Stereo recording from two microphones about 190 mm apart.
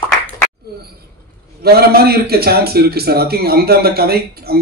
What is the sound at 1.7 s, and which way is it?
A man's voice, 55° right (ahead or behind).